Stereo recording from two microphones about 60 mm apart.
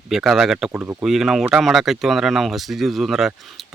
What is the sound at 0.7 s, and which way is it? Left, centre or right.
Speech, right.